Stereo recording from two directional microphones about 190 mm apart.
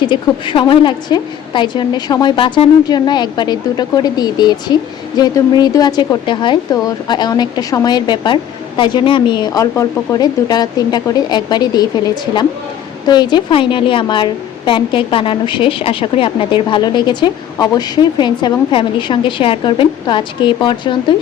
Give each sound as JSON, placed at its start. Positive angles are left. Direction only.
{"t": 0.1, "sound": "a woman's voice", "side_deg": 25}